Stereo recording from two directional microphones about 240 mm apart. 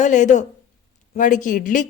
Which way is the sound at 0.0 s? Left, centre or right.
Left.